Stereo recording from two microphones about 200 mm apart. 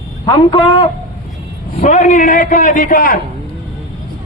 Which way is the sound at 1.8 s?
40° left (ahead or behind).